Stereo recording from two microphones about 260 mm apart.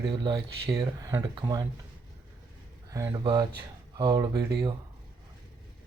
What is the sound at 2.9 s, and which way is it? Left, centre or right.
Speech, centre.